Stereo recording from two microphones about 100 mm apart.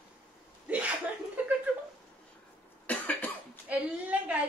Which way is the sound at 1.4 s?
15° right (ahead or behind).